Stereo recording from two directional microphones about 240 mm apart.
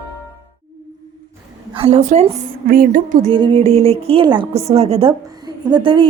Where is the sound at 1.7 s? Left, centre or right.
Right.